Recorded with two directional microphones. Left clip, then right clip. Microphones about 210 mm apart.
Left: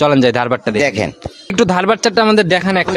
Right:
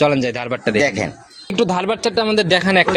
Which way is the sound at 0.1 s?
40° left (ahead or behind).